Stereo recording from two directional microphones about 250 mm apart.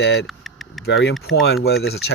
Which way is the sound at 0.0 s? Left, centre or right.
Left.